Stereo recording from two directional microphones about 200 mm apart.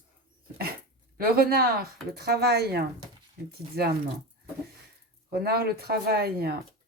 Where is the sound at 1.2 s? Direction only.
50° right (ahead or behind).